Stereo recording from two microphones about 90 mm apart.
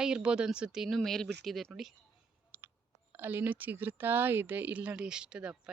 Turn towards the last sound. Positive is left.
turn(degrees=-10)  # may be behind; listen again after turning